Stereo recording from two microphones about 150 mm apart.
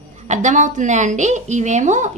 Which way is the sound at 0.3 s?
55° right (ahead or behind).